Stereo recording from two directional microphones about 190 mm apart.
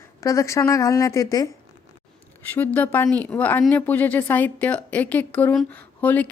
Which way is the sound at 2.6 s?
10° left (ahead or behind).